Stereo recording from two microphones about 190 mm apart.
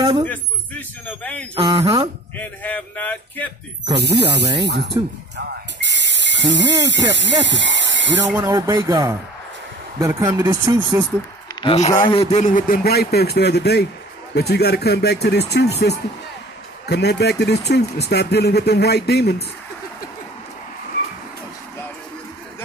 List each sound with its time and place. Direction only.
0.0 s speech: 25° right (ahead or behind)
0.3 s speech: 10° left (ahead or behind)
1.5 s speech: 25° right (ahead or behind)
2.3 s speech: 10° left (ahead or behind)
4.0 s speech: 60° right (ahead or behind)
8.3 s speech: 15° right (ahead or behind)
11.6 s a man's voice: 35° left (ahead or behind); by 19.3 s 60° left (ahead or behind)